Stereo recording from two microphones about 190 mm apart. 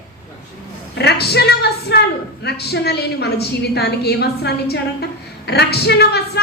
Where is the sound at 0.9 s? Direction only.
60° left (ahead or behind).